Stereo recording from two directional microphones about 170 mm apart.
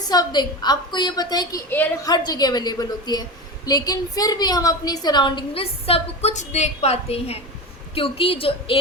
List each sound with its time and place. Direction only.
0.0 s a woman's voice: 25° left (ahead or behind)